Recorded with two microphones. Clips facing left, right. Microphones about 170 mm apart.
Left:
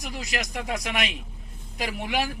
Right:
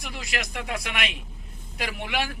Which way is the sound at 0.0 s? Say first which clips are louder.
Left 1 dB; 40° left (ahead or behind).